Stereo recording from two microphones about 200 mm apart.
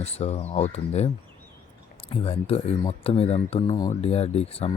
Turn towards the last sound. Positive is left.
turn(degrees=30)  # may be behind; listen again after turning